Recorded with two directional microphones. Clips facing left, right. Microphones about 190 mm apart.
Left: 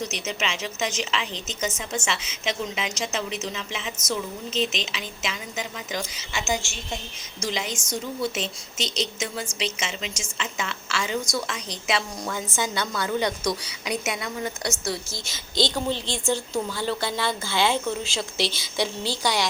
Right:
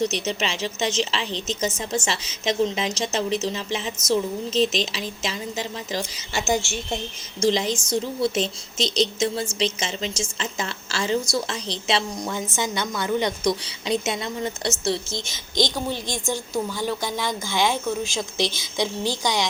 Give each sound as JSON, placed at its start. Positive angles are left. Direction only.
{"t": 0.0, "sound": "a woman's voice", "side_deg": -30}